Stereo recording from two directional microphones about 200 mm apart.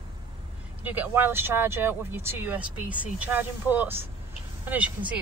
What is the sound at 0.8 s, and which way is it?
Speech, 10° right (ahead or behind).